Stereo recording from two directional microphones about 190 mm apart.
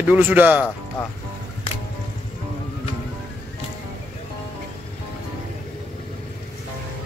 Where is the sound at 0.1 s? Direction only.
10° right (ahead or behind).